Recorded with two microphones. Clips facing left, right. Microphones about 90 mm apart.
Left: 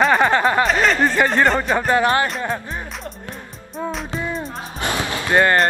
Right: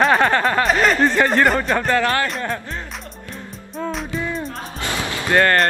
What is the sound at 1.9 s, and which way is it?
Speech, 20° left (ahead or behind).